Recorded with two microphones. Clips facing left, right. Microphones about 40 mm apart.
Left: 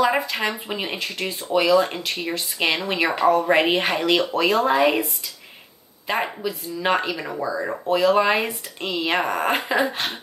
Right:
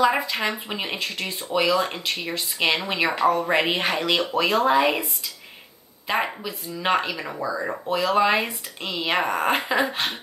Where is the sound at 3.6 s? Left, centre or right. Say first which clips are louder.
Left 3 dB; centre.